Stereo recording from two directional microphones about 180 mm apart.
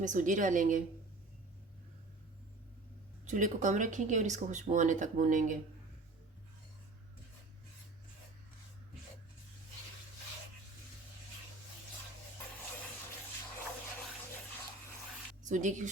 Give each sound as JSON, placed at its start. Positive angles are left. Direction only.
{"t": 0.0, "sound": "speech", "side_deg": -45}
{"t": 3.2, "sound": "speech", "side_deg": -45}
{"t": 15.4, "sound": "speech", "side_deg": -45}